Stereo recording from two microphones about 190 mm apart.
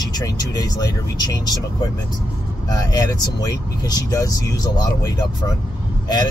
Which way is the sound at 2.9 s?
20° left (ahead or behind).